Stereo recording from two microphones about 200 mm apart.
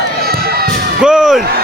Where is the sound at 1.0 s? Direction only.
5° right (ahead or behind).